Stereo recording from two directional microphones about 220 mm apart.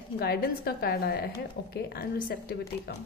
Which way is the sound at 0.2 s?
45° left (ahead or behind).